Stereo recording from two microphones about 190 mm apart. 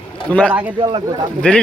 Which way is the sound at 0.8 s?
25° right (ahead or behind).